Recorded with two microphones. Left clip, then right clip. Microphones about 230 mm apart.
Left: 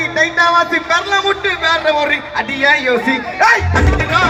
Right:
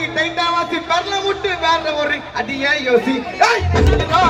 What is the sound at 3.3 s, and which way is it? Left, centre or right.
Speech, right.